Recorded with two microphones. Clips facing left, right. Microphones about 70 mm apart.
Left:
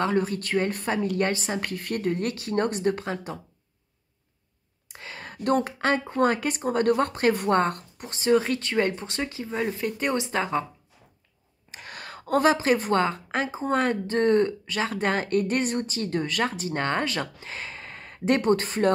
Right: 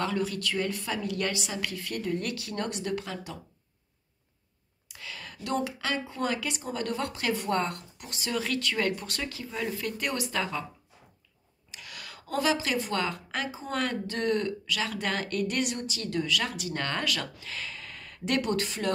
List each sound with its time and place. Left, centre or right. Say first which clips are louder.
0.0 s speech: left 5 dB; left
4.8 s speech: left 3 dB; left
11.7 s speech: left 5 dB; left